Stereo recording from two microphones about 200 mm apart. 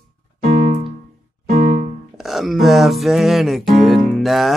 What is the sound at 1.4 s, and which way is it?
Music, 35° right (ahead or behind).